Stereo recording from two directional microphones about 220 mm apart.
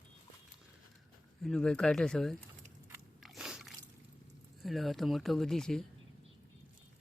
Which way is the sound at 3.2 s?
Centre (ahead or behind).